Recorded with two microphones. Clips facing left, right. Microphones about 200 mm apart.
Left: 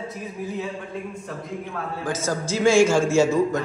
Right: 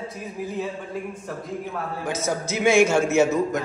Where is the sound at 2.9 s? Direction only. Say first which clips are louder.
Left 1 dB; 20° right (ahead or behind).